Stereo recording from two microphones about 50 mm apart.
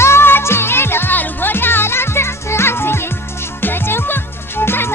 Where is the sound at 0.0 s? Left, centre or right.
Left.